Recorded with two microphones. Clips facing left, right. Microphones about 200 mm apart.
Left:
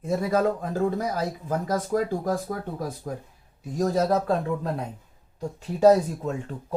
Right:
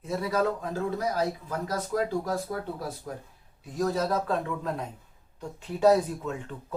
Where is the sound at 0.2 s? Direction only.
45° left (ahead or behind).